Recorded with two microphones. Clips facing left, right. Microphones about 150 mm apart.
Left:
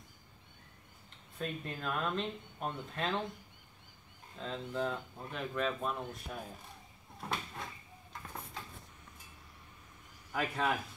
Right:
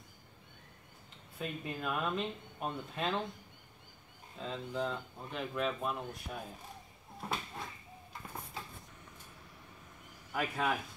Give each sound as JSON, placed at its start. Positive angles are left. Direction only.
{"t": 1.4, "sound": "speech", "side_deg": -5}
{"t": 4.4, "sound": "speech", "side_deg": 0}
{"t": 7.2, "sound": "a sound", "side_deg": 0}
{"t": 10.3, "sound": "speech", "side_deg": -5}